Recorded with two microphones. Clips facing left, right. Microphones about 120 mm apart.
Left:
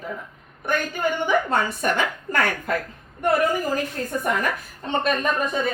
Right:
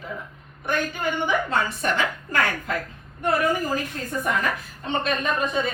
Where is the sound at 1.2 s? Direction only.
55° left (ahead or behind).